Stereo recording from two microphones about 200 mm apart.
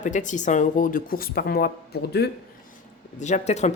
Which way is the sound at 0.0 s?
40° left (ahead or behind).